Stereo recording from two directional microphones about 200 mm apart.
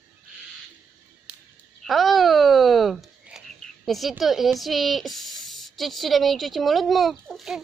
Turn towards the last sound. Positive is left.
turn(degrees=0)  # may be behind; listen again after turning